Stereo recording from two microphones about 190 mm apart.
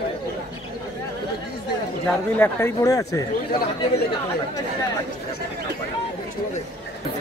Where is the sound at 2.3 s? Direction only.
10° left (ahead or behind).